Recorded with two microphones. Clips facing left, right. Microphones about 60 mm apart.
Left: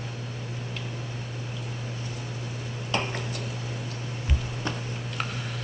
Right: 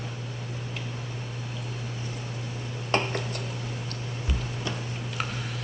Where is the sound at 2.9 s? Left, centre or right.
Right.